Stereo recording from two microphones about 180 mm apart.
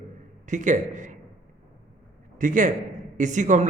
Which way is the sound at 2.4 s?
45° right (ahead or behind).